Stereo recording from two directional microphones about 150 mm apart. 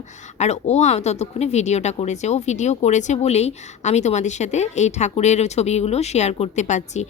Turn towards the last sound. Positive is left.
turn(degrees=50)  # may be behind; listen again after turning